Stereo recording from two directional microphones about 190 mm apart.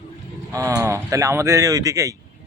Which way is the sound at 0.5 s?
15° right (ahead or behind).